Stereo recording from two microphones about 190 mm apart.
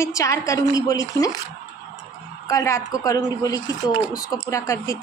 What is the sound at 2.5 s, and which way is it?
A woman's voice, 15° left (ahead or behind).